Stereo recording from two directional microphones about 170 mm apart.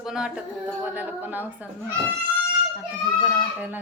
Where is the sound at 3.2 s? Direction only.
10° right (ahead or behind).